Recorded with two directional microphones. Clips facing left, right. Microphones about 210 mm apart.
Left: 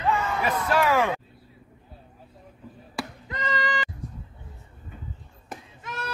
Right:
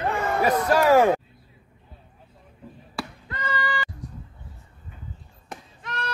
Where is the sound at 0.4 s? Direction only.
40° right (ahead or behind).